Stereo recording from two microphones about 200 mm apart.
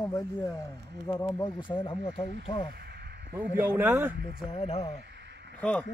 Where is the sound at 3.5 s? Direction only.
10° right (ahead or behind).